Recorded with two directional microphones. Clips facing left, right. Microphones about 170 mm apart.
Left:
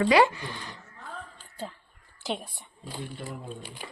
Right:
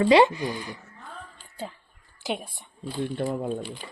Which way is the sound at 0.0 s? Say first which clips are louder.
Right 3 dB; 25° right (ahead or behind).